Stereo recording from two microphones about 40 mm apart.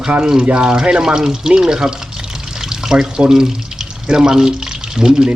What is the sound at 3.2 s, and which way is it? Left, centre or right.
Speech, centre.